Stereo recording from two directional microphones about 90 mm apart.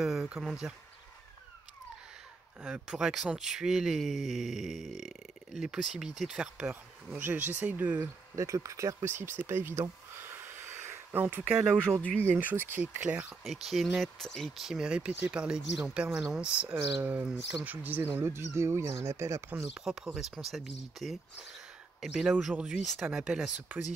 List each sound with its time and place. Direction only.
0.0 s speech: 5° right (ahead or behind)
2.6 s speech: 10° right (ahead or behind)
8.4 s speech: 35° right (ahead or behind)
11.5 s speech: 10° right (ahead or behind)
12.4 s speech: 20° right (ahead or behind)
13.4 s speech: centre (ahead or behind)
14.7 s speech: 10° right (ahead or behind); by 19.6 s 35° right (ahead or behind)
19.8 s speech: 5° right (ahead or behind)